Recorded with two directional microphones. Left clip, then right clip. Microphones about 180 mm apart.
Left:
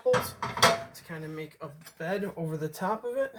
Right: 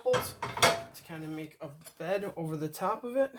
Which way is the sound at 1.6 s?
35° right (ahead or behind).